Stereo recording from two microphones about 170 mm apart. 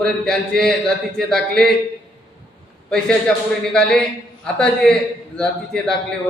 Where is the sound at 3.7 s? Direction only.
5° left (ahead or behind).